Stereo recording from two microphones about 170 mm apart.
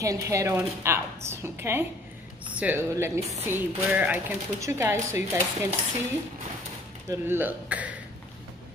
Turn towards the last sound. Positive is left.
turn(degrees=-10)  # may be behind; listen again after turning